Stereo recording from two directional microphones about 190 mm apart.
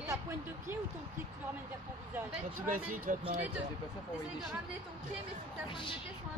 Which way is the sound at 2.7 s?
45° right (ahead or behind).